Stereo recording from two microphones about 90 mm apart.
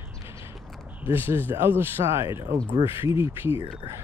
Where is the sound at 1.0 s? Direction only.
25° right (ahead or behind).